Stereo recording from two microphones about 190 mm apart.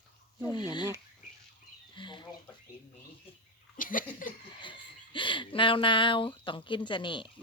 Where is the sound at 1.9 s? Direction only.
25° left (ahead or behind).